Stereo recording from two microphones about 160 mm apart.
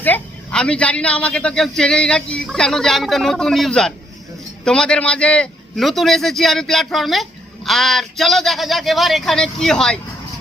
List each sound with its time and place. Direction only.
0.0 s a man's voice: 10° left (ahead or behind)